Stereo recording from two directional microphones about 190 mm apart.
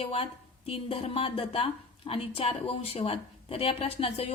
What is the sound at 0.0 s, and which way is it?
A woman's voice, 30° left (ahead or behind).